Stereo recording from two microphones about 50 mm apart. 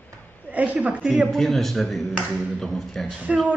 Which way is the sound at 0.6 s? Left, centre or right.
Right.